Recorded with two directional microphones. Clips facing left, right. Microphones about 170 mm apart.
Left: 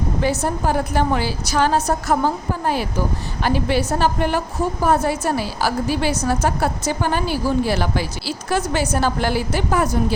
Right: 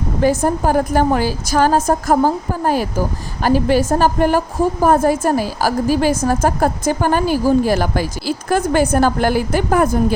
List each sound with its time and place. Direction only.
0.2 s speech: 45° right (ahead or behind)